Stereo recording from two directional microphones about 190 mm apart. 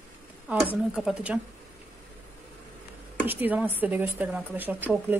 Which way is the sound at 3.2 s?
10° right (ahead or behind).